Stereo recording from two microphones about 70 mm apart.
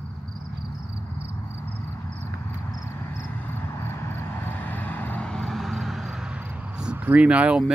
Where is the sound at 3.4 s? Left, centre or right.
Left.